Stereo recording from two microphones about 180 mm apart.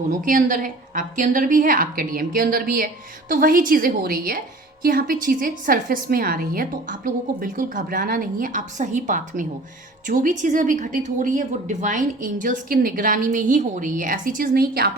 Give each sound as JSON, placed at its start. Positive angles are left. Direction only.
{"t": 0.2, "sound": "a woman's voice", "side_deg": -45}